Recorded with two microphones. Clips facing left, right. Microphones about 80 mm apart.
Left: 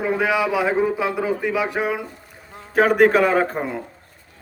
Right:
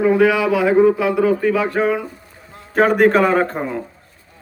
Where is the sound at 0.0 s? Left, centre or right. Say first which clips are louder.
Right 6 dB; centre.